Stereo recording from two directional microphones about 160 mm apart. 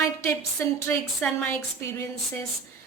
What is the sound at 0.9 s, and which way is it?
Speech, 5° left (ahead or behind).